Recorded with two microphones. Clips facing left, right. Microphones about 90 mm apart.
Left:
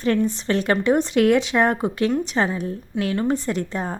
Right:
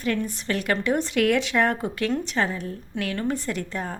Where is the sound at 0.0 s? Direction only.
30° left (ahead or behind).